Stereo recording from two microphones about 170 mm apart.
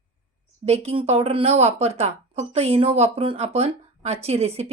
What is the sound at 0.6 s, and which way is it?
A woman's voice, 40° right (ahead or behind).